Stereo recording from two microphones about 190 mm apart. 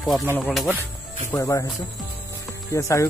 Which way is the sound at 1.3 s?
15° left (ahead or behind).